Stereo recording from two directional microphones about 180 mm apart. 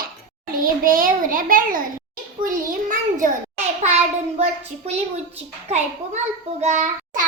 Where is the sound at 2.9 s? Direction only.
45° right (ahead or behind).